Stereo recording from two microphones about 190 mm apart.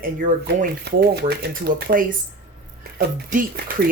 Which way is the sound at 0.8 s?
60° right (ahead or behind).